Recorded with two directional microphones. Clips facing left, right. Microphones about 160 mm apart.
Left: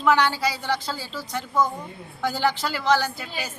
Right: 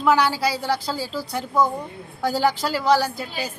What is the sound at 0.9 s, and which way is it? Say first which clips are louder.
Speech: right 6 dB; 40° right (ahead or behind).